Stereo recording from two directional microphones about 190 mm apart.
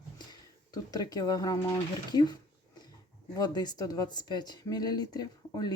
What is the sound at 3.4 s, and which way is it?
Speech, 20° left (ahead or behind).